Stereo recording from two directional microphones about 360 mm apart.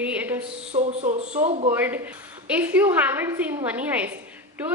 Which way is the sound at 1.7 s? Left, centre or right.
Centre.